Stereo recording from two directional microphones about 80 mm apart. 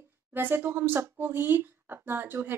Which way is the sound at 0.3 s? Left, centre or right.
Right.